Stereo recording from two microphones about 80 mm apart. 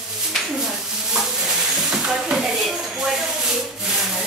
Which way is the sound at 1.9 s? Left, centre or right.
Centre.